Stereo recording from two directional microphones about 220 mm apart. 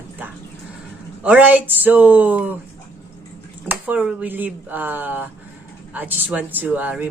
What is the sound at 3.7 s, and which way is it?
Speech, 5° right (ahead or behind).